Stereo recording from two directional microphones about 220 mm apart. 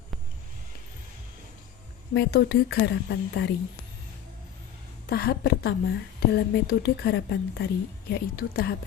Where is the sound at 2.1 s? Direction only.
45° left (ahead or behind).